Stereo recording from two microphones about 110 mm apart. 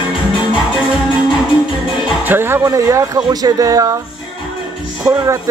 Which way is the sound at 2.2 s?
20° right (ahead or behind).